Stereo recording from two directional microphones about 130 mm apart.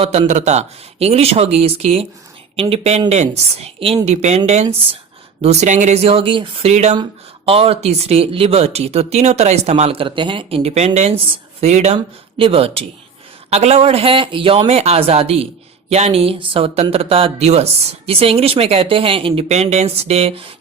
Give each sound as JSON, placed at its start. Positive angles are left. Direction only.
{"t": 0.0, "sound": "a woman's voice", "side_deg": -60}
{"t": 6.9, "sound": "speech", "side_deg": -40}
{"t": 11.9, "sound": "speech", "side_deg": -45}